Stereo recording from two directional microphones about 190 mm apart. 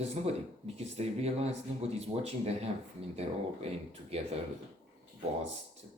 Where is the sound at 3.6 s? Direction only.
35° right (ahead or behind).